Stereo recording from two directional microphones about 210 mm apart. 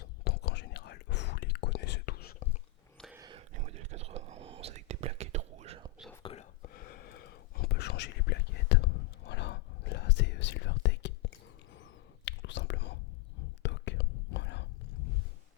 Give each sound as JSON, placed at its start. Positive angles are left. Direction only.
{"t": 0.3, "sound": "whispering", "side_deg": 50}
{"t": 3.2, "sound": "whispering", "side_deg": -20}
{"t": 3.5, "sound": "whispering", "side_deg": -35}
{"t": 6.2, "sound": "whispering", "side_deg": 30}
{"t": 6.6, "sound": "whispering", "side_deg": 45}